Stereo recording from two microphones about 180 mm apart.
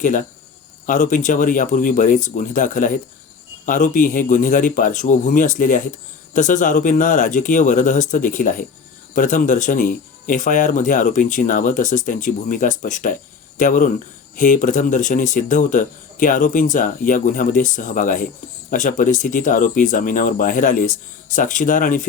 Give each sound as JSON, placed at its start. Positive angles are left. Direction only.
{"t": 0.0, "sound": "speech", "side_deg": 45}